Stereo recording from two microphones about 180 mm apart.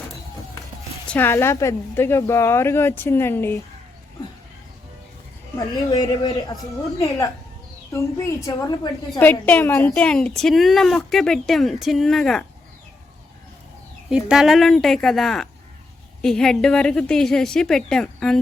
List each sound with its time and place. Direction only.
1.0 s a woman's voice: 10° left (ahead or behind)
5.5 s speech: 20° left (ahead or behind)
7.9 s a woman's voice: 15° left (ahead or behind)
14.1 s speech: 5° right (ahead or behind)